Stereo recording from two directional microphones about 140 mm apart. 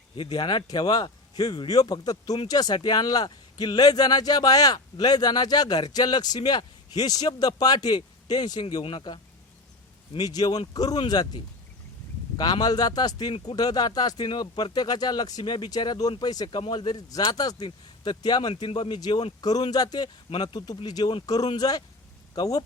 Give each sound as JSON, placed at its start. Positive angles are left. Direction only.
{"t": 0.2, "sound": "speech", "side_deg": 35}
{"t": 8.7, "sound": "speech", "side_deg": 40}
{"t": 12.4, "sound": "speech", "side_deg": 30}